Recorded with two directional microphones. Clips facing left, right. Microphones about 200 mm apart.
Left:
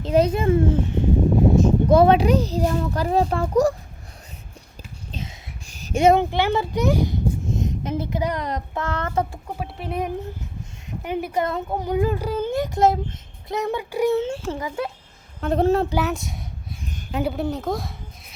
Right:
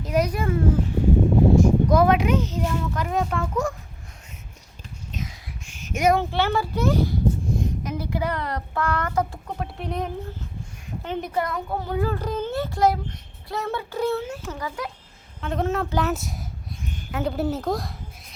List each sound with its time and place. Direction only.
0.0 s a child's voice: 25° left (ahead or behind)
5.1 s a sound: 35° left (ahead or behind)
9.3 s speech: 5° left (ahead or behind)
11.4 s a child's voice: 20° left (ahead or behind)
14.3 s a child's voice: 30° left (ahead or behind)
15.9 s a woman's voice: 5° left (ahead or behind)